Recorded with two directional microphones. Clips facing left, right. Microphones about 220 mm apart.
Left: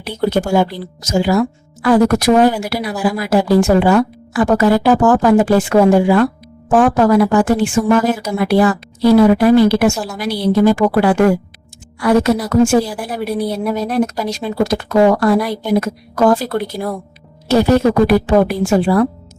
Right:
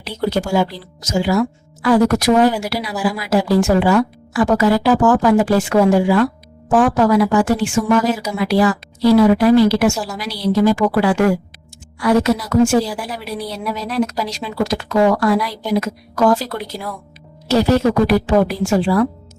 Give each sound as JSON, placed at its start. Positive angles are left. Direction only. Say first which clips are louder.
{"t": 0.0, "sound": "speech", "louder": "left 3 dB", "side_deg": 55}